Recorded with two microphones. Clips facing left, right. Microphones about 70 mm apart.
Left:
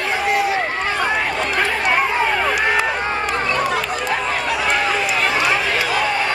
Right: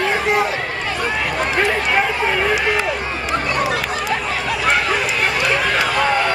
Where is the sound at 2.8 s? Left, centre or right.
Left.